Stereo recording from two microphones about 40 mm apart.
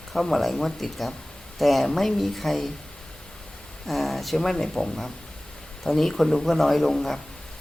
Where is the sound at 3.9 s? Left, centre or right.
Centre.